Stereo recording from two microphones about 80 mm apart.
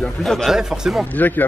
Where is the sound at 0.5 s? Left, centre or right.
Centre.